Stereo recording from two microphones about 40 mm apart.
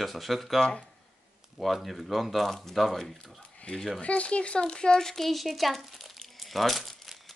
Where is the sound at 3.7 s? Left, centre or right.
Left; by 7.3 s centre.